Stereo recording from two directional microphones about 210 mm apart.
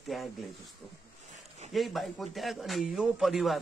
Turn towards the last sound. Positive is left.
turn(degrees=0)  # may be behind; listen again after turning